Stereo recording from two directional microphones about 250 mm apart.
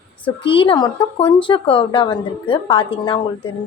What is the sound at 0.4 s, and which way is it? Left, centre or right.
A woman's voice, centre.